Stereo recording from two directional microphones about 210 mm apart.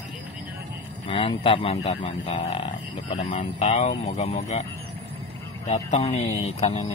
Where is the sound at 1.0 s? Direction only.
25° left (ahead or behind).